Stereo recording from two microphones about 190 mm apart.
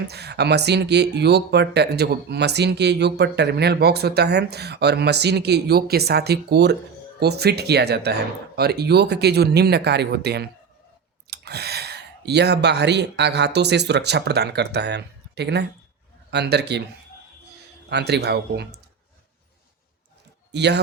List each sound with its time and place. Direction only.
0.1 s speech: 60° right (ahead or behind)
17.8 s speech: 60° right (ahead or behind)
20.5 s speech: 60° right (ahead or behind)